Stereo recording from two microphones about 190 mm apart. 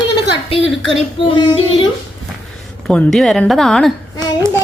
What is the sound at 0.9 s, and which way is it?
Child singing, 30° left (ahead or behind).